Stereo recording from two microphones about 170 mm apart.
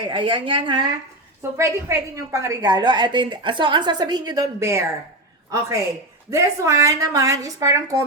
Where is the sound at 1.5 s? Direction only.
15° right (ahead or behind).